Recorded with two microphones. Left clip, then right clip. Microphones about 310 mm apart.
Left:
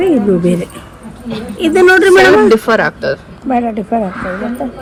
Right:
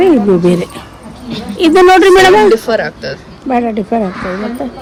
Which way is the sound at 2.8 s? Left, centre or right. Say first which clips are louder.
Left 5 dB; centre.